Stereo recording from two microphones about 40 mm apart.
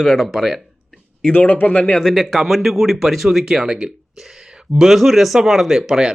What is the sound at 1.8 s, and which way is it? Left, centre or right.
Speech, centre.